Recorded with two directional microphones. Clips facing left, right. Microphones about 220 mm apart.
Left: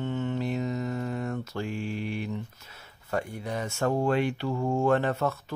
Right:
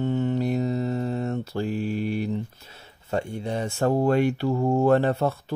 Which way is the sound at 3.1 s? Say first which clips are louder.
Right 4 dB; 25° right (ahead or behind).